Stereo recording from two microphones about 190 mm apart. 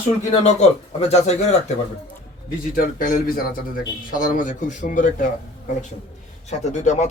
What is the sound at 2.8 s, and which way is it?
A man's voice, 50° left (ahead or behind).